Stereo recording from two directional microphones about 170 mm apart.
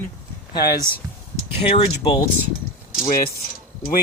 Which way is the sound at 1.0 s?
20° right (ahead or behind).